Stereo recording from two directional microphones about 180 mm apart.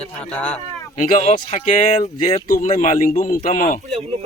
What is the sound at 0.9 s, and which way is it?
Speech, 50° left (ahead or behind).